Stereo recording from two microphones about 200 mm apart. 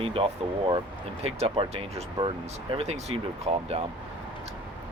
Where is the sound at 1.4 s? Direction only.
30° right (ahead or behind).